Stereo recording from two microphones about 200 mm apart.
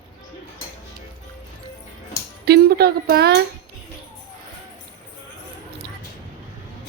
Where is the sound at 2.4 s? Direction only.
50° right (ahead or behind).